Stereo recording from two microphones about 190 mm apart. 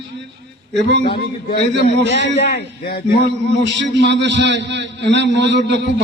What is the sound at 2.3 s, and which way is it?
Speech, 60° left (ahead or behind).